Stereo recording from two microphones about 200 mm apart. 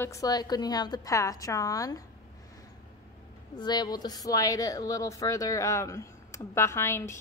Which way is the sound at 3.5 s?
20° left (ahead or behind).